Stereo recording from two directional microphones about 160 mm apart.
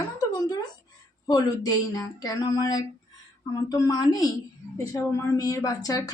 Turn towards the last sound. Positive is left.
turn(degrees=20)  # may be behind; listen again after turning